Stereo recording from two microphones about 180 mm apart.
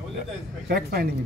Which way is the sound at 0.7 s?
60° right (ahead or behind).